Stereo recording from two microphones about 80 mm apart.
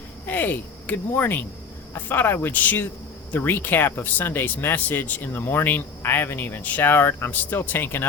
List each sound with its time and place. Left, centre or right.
0.3 s speech: left